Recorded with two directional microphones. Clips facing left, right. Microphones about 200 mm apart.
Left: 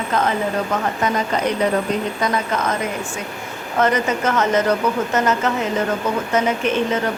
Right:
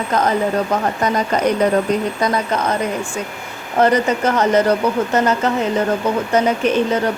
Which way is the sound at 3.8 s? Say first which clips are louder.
Right 4 dB; 35° right (ahead or behind).